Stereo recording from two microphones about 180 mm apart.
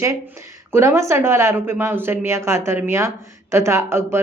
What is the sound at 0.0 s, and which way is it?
Speech, 15° right (ahead or behind).